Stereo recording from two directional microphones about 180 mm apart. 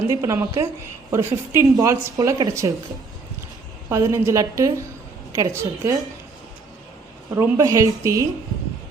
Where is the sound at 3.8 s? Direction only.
15° right (ahead or behind).